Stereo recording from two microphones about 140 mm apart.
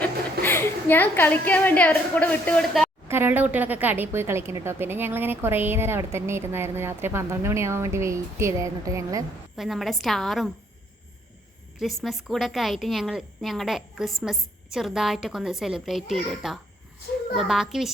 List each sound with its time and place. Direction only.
0.0 s a woman's voice: 15° left (ahead or behind)
3.1 s a woman's voice: 15° right (ahead or behind)
9.6 s a woman's voice: centre (ahead or behind)
12.0 s a woman's voice: centre (ahead or behind)